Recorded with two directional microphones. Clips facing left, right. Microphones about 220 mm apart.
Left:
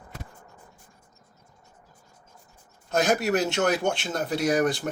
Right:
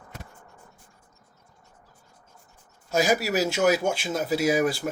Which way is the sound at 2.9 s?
5° right (ahead or behind).